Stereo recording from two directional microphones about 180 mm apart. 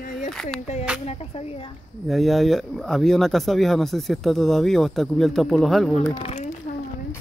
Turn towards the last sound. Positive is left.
turn(degrees=35)  # may be behind; listen again after turning